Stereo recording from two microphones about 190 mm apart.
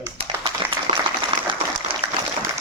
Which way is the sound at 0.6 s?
30° right (ahead or behind).